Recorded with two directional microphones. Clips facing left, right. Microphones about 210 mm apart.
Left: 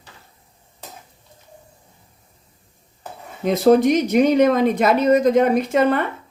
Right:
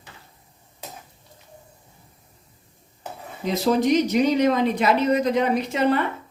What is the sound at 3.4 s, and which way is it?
Speech, 55° left (ahead or behind).